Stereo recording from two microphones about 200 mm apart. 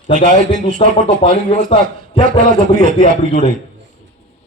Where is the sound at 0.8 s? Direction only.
30° left (ahead or behind).